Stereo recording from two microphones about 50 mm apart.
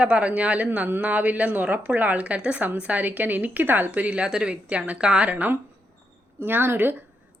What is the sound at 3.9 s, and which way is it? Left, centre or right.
A woman's voice, right.